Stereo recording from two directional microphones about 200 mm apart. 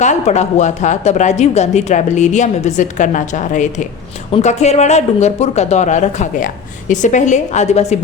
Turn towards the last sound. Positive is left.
turn(degrees=35)  # may be behind; listen again after turning